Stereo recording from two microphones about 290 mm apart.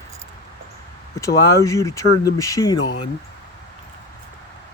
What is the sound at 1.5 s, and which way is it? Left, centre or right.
Speech, centre.